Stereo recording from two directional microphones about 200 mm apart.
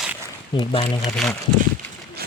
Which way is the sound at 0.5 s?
25° left (ahead or behind).